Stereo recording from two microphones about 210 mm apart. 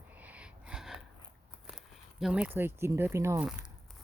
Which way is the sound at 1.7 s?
Centre (ahead or behind).